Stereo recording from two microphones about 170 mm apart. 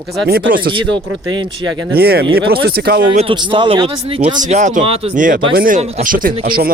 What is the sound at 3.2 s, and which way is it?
Speech, 30° right (ahead or behind).